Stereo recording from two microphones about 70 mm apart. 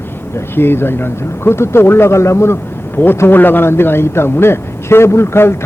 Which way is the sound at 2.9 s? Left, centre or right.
Left.